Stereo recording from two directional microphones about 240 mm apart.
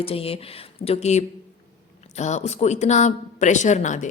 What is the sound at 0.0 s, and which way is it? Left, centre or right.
A woman's voice, left.